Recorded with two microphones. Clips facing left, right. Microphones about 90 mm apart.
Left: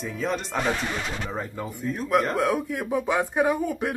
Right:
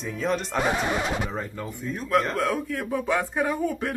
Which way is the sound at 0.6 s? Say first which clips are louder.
Right 3 dB; 15° right (ahead or behind).